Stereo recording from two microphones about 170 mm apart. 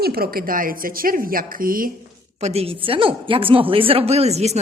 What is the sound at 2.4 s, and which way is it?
A woman's voice, 35° right (ahead or behind).